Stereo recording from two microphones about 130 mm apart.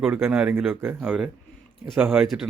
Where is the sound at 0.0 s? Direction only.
10° right (ahead or behind).